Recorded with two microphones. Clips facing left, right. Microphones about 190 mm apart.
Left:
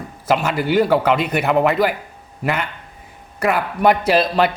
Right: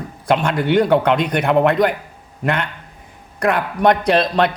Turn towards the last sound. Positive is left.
turn(degrees=5)  # may be behind; listen again after turning